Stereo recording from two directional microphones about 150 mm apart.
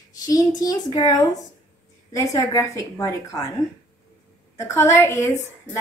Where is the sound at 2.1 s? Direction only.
20° left (ahead or behind).